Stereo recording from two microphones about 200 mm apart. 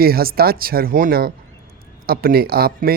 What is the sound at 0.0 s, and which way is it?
Speech, 50° right (ahead or behind).